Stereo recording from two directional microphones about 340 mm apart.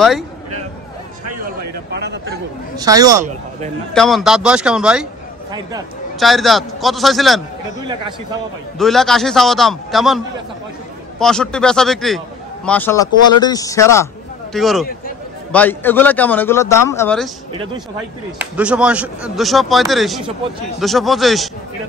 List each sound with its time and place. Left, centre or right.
1.9 s speech: right
2.8 s speech: centre
3.9 s speech: centre
6.1 s speech: centre
8.7 s speech: centre
18.4 s speech: centre